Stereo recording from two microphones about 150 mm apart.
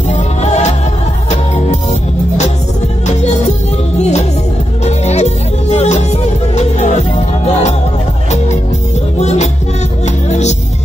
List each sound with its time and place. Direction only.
0.1 s music: 50° left (ahead or behind)
9.2 s music: 50° left (ahead or behind)